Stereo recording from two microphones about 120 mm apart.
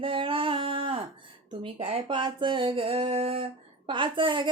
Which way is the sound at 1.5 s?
45° right (ahead or behind).